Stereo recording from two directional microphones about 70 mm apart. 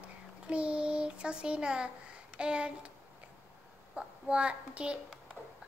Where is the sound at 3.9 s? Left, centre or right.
Centre.